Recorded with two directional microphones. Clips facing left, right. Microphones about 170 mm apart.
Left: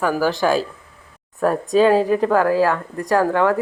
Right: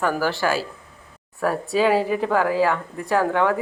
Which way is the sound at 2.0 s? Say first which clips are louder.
Left 5 dB; 10° right (ahead or behind).